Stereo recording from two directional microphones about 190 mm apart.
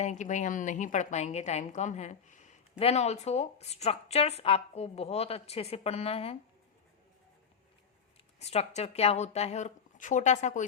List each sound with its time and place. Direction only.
0.0 s a woman's voice: 40° left (ahead or behind)
8.4 s a woman's voice: 35° left (ahead or behind)